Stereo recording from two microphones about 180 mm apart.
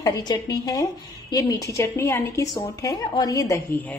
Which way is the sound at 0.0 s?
20° left (ahead or behind).